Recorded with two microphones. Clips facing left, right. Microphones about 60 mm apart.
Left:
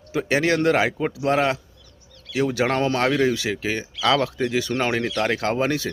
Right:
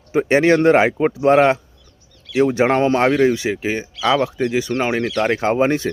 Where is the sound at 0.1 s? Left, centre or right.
Right.